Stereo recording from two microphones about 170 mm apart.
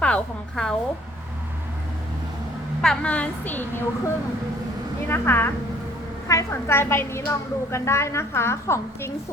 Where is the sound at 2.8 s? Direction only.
5° left (ahead or behind).